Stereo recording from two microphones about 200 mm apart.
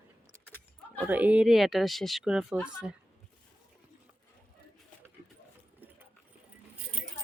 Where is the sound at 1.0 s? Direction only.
10° right (ahead or behind).